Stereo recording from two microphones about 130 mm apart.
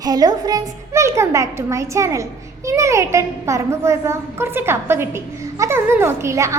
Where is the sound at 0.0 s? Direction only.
30° right (ahead or behind).